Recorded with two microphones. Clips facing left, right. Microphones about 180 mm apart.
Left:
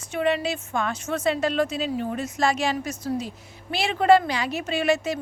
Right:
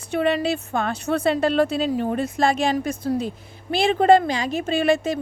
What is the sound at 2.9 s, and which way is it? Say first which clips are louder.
Speech: right 4 dB; 55° right (ahead or behind).